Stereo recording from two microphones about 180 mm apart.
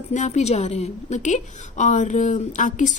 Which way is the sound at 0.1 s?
40° left (ahead or behind).